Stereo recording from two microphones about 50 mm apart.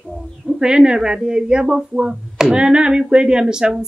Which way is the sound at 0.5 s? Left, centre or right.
Centre.